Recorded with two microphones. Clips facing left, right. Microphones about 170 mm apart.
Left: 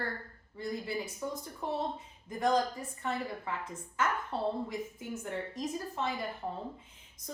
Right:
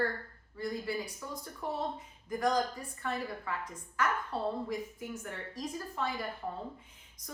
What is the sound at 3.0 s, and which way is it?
A woman's voice, 25° left (ahead or behind).